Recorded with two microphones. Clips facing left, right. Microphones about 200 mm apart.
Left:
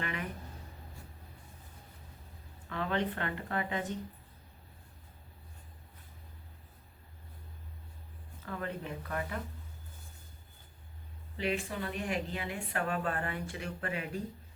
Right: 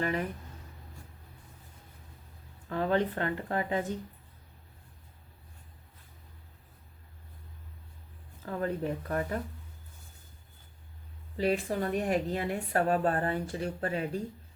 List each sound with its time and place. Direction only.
0.0 s speech: 40° right (ahead or behind)
2.6 s speech: 40° right (ahead or behind)
8.4 s speech: 40° right (ahead or behind)
11.3 s speech: 40° right (ahead or behind)